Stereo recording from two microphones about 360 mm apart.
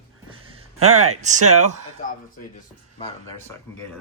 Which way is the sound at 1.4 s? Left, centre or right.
Right.